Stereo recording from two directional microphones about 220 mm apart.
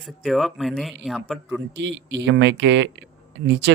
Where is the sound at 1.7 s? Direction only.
55° right (ahead or behind).